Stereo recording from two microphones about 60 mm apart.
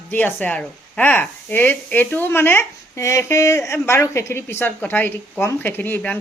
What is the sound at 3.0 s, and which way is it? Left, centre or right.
Speech, left.